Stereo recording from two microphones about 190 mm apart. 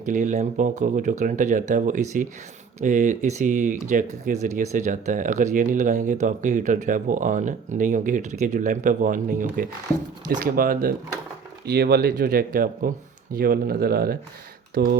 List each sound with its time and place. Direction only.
0.0 s speech: 40° right (ahead or behind)